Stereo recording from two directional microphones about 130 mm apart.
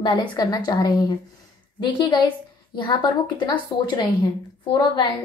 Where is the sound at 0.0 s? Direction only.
35° left (ahead or behind).